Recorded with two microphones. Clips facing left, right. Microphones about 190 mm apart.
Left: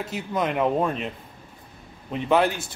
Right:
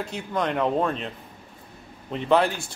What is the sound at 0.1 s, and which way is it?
Speech, 5° left (ahead or behind).